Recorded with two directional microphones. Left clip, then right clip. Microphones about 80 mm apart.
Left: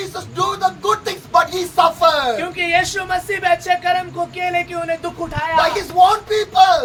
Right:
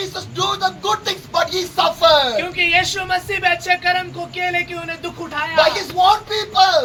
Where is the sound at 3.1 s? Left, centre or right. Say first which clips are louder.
Left 1 dB; left.